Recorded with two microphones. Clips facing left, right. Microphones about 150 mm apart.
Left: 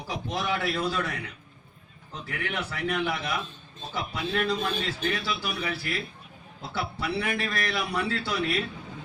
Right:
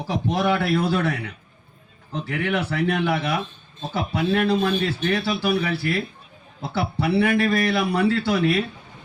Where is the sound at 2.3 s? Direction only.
75° right (ahead or behind).